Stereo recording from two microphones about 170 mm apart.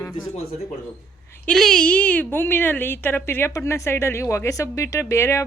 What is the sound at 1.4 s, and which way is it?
A woman's voice, 5° left (ahead or behind).